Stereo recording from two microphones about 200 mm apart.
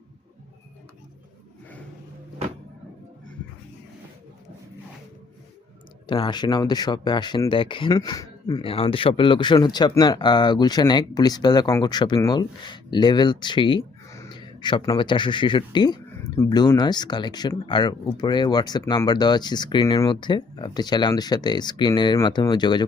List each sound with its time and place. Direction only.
6.1 s speech: 25° left (ahead or behind)